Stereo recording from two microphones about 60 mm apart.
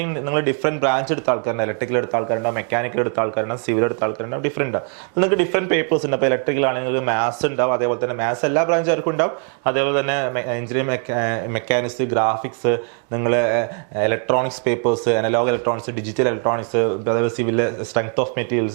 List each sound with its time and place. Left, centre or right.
0.0 s speech: right